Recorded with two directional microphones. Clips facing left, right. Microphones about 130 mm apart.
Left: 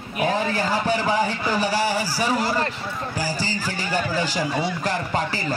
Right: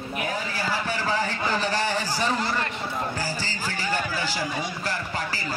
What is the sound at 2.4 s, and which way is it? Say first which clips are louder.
Speech: left 4 dB; 35° left (ahead or behind).